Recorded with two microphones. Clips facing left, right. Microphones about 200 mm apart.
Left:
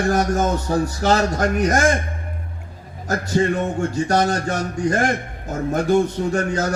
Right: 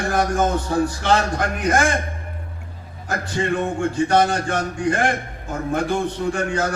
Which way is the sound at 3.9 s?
40° left (ahead or behind).